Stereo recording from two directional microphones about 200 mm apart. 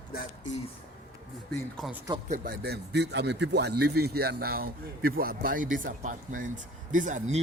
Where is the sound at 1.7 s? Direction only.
Centre (ahead or behind).